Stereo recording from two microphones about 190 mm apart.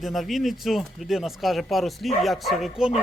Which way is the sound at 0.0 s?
Centre (ahead or behind).